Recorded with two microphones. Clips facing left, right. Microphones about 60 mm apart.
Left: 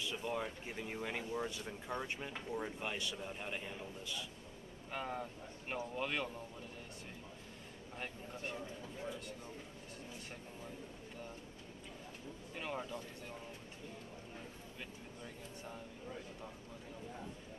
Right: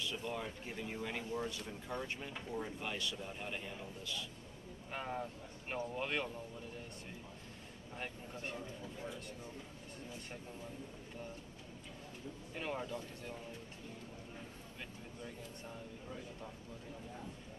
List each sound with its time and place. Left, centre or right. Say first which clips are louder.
0.0 s speech: left 1 dB; centre
4.0 s a man's voice: right 2 dB; centre
4.9 s speech: even; centre
8.0 s speech: even; centre
12.5 s speech: right 1 dB; centre